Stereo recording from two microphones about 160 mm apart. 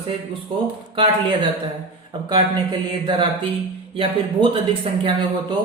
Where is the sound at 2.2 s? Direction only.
25° right (ahead or behind).